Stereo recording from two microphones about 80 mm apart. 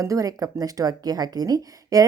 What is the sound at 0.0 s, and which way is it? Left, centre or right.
Speech, right.